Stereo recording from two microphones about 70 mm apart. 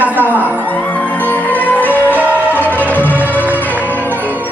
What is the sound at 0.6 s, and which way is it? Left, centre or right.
Music, left.